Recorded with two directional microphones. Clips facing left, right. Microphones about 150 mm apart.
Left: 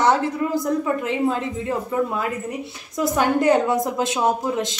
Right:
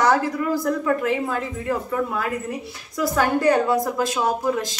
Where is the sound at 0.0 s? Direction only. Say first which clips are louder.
Even; 25° left (ahead or behind).